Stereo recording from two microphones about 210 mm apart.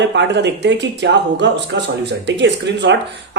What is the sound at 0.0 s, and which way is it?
Speech, 55° right (ahead or behind).